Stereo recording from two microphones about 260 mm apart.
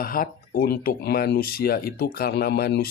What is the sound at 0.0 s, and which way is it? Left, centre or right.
Speech, left.